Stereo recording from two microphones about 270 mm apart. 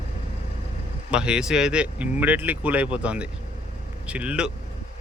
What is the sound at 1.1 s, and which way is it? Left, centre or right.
Speech, centre.